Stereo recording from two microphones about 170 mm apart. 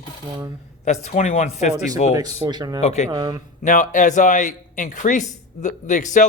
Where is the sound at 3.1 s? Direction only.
30° right (ahead or behind).